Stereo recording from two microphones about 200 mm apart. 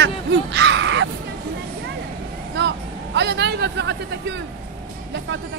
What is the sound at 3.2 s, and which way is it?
Speech, 60° right (ahead or behind).